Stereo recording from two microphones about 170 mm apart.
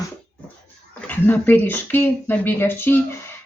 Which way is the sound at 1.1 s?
10° left (ahead or behind).